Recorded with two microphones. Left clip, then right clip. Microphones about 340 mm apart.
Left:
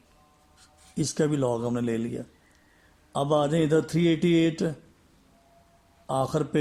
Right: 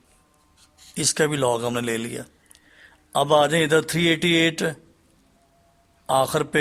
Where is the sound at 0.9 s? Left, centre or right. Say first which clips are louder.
Right 5 dB; right.